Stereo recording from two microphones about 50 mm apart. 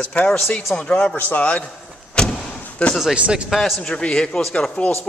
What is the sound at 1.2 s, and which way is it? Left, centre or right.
Speech, left.